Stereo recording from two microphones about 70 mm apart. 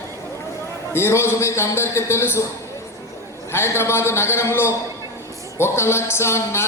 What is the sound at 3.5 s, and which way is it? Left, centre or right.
A man's voice, left.